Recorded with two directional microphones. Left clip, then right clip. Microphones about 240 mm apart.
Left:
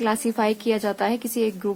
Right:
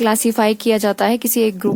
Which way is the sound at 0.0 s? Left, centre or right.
Right.